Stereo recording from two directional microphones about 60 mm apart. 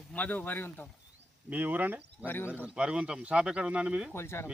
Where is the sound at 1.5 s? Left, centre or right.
Right.